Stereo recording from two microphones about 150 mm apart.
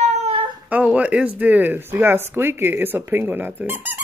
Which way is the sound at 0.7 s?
10° right (ahead or behind).